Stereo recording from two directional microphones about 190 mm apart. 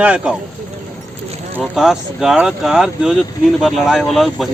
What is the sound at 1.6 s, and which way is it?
Speech, centre (ahead or behind).